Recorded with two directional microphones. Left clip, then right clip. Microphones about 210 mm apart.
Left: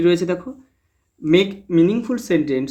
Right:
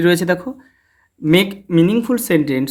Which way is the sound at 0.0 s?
45° right (ahead or behind).